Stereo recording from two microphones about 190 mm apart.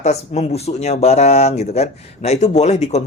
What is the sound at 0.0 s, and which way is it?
Speech, 35° left (ahead or behind).